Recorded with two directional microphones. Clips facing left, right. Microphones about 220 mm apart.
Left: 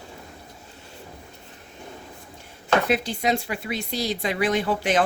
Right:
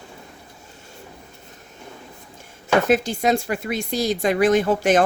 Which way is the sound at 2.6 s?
45° right (ahead or behind).